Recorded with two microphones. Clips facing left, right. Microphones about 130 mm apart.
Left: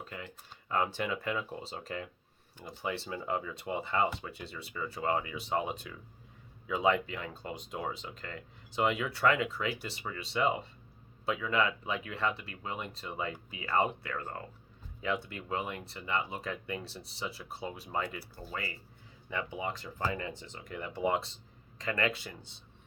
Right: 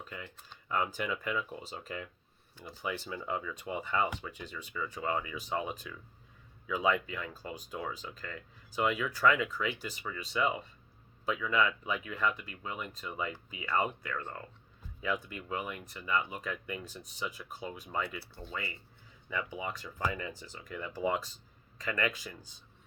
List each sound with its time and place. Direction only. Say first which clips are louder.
0.0 s computer keyboard: left 1 dB; 35° left (ahead or behind)
0.7 s speech: left 1 dB; 35° left (ahead or behind)
19.3 s speech: left 1 dB; 30° left (ahead or behind)